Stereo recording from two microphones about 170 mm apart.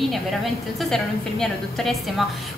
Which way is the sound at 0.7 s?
Centre (ahead or behind).